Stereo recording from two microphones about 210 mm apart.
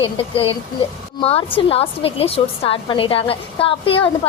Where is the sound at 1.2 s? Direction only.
25° left (ahead or behind).